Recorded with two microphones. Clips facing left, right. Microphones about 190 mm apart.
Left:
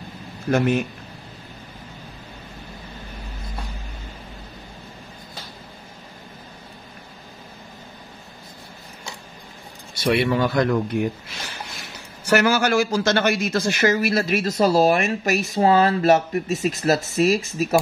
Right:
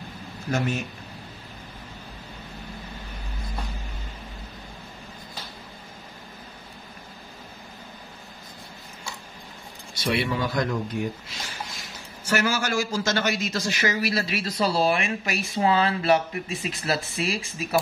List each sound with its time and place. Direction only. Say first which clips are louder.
0.5 s speech: left 7 dB; 55° left (ahead or behind)
9.9 s a man's voice: left 6 dB; 60° left (ahead or behind); by 17.7 s 40° left (ahead or behind)